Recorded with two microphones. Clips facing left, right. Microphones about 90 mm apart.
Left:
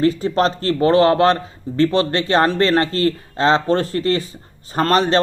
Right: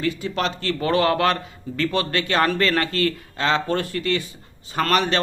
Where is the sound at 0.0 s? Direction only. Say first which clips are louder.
Left 8 dB; 35° left (ahead or behind).